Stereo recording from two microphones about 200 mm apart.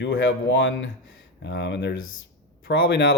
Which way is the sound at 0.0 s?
65° left (ahead or behind).